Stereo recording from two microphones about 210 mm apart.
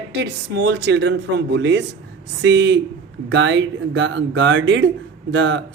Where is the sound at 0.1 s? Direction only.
55° right (ahead or behind).